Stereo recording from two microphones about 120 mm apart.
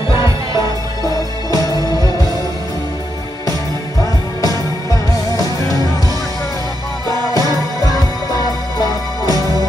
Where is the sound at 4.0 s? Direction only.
30° left (ahead or behind).